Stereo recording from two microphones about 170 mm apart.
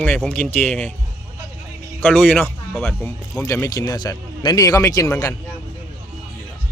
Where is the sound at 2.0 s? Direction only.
10° left (ahead or behind).